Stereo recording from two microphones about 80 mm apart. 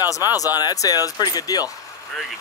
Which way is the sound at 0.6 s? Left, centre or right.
Left.